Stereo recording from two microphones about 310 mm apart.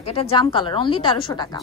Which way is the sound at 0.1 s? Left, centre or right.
Centre.